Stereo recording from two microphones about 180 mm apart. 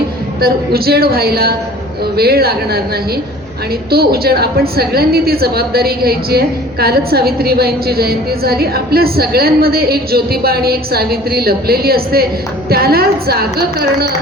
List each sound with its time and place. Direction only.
0.4 s a woman's voice: 60° right (ahead or behind)
3.9 s a woman's voice: 60° right (ahead or behind)